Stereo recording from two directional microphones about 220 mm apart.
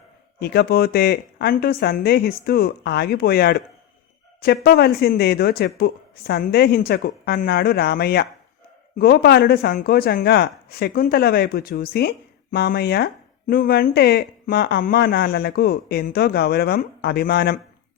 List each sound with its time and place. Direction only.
0.3 s speech: 45° left (ahead or behind)